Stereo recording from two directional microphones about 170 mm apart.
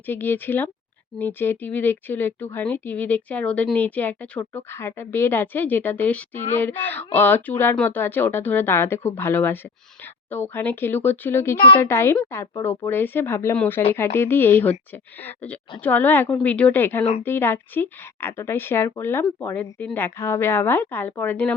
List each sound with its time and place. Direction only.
0.0 s speech: 10° left (ahead or behind)